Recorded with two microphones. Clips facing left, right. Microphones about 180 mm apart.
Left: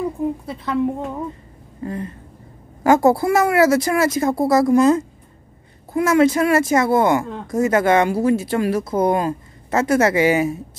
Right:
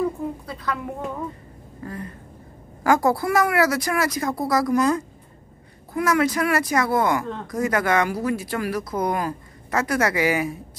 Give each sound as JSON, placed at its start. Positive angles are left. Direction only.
{"t": 0.5, "sound": "speech", "side_deg": 25}